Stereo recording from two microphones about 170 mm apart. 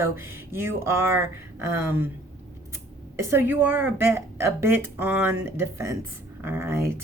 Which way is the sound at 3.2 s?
15° right (ahead or behind).